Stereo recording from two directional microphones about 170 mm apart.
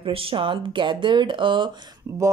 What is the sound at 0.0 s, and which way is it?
Speech, 30° right (ahead or behind).